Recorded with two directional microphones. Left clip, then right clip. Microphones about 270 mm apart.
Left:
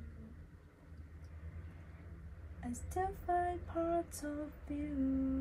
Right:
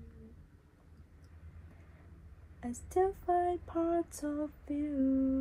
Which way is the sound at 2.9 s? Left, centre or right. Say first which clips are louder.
Right 6 dB; centre.